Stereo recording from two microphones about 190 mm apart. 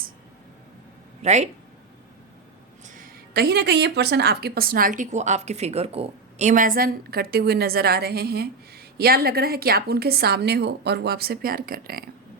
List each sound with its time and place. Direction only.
1.2 s speech: 35° right (ahead or behind)
2.8 s speech: 45° right (ahead or behind)